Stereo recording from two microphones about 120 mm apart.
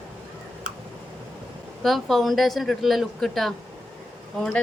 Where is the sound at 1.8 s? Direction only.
Centre (ahead or behind).